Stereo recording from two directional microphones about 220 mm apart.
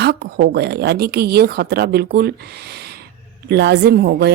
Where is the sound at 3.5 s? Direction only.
50° right (ahead or behind).